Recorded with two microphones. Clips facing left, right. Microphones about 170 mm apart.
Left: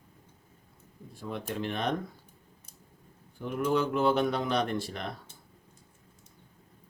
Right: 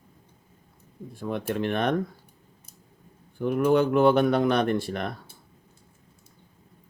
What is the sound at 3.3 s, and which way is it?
Speech, 60° right (ahead or behind).